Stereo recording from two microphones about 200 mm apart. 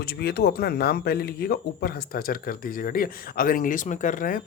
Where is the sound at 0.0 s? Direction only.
55° left (ahead or behind).